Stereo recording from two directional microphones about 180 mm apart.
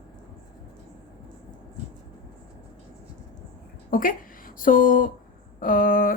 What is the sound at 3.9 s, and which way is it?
Speech, 50° left (ahead or behind).